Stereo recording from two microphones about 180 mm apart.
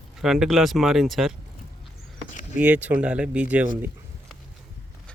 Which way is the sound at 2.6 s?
5° right (ahead or behind).